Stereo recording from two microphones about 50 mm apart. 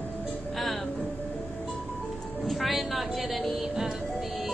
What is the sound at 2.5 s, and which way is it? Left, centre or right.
Speech, centre.